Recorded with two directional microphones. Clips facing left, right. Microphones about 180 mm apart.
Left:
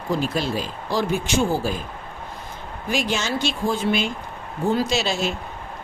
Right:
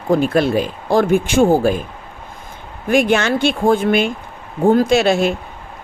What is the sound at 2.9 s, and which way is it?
Speech, 55° right (ahead or behind).